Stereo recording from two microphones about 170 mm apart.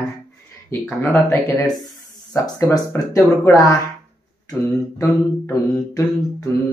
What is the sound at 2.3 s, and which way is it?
A man's voice, 20° left (ahead or behind).